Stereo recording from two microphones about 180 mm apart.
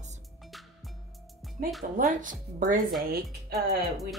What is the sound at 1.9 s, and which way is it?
Speech, 45° right (ahead or behind).